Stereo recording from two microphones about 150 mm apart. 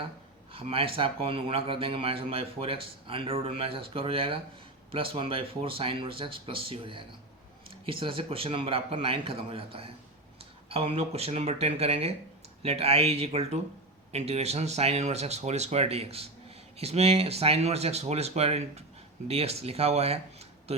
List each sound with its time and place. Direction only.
0.5 s speech: 40° right (ahead or behind)